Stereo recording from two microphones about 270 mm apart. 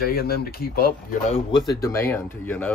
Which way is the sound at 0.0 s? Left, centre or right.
Left.